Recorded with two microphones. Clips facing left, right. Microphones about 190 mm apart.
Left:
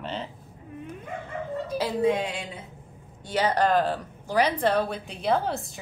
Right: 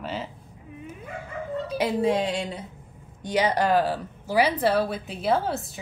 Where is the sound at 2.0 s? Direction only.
35° right (ahead or behind).